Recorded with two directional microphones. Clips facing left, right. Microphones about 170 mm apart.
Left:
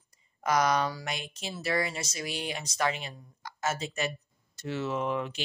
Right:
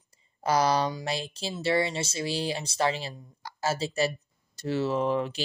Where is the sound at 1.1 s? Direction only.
30° right (ahead or behind).